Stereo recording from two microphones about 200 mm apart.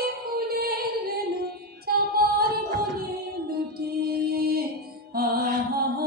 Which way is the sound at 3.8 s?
50° right (ahead or behind).